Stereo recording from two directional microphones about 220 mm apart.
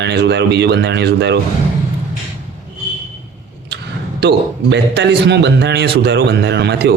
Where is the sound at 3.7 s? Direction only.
50° right (ahead or behind).